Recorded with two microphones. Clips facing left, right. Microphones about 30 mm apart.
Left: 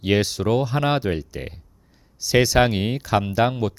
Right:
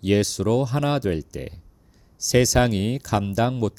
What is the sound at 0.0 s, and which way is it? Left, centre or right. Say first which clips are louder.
Speech: even; left.